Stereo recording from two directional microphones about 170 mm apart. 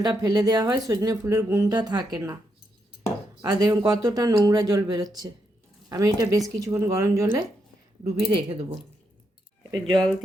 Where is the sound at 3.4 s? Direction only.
20° right (ahead or behind).